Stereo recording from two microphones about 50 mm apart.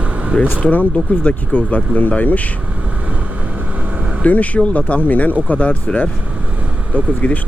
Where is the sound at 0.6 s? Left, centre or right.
Left.